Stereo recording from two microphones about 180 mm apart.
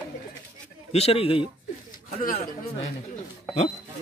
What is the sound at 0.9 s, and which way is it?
Speech, 35° left (ahead or behind).